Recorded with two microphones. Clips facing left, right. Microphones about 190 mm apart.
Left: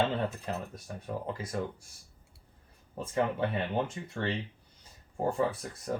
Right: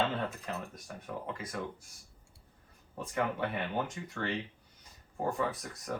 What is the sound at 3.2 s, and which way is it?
Speech, 25° left (ahead or behind).